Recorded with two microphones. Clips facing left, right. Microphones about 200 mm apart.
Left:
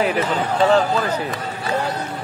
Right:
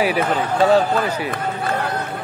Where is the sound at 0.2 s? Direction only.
55° right (ahead or behind).